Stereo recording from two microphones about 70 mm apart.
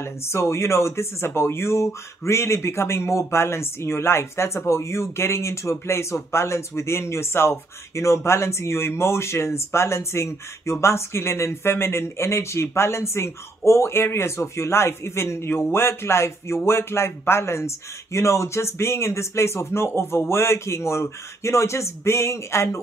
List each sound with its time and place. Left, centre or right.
0.0 s speech: left